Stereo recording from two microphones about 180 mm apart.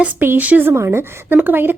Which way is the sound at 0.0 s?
10° right (ahead or behind).